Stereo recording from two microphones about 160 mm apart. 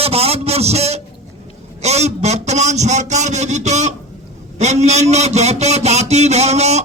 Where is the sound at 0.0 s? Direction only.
40° right (ahead or behind).